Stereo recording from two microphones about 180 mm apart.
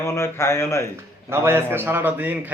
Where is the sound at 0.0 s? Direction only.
15° left (ahead or behind).